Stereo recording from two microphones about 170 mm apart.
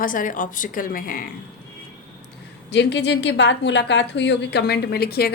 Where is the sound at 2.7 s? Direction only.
90° left.